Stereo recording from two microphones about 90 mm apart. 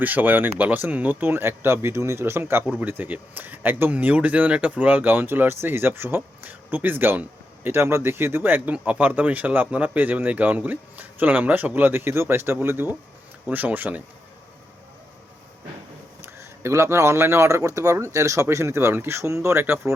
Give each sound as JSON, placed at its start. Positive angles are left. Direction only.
{"t": 0.0, "sound": "speech", "side_deg": -20}
{"t": 16.2, "sound": "speech", "side_deg": -30}